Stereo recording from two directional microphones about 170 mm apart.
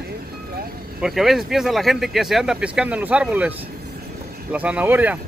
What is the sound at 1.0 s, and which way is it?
Speech, centre (ahead or behind).